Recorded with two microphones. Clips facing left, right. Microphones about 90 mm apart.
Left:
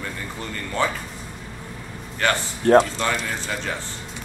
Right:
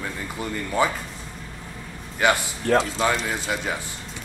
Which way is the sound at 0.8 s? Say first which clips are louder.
Right 1 dB; 10° right (ahead or behind).